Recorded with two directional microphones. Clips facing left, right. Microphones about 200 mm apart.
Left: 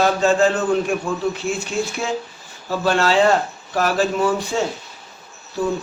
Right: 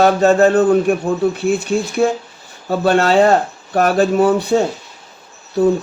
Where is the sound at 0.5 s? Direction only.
35° right (ahead or behind).